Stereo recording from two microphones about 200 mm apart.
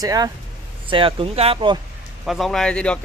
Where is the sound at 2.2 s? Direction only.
Centre (ahead or behind).